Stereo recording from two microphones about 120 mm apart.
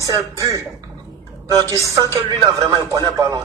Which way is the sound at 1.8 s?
25° right (ahead or behind).